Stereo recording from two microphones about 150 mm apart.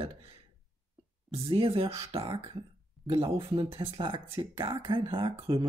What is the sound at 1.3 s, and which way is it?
Speech, 40° right (ahead or behind).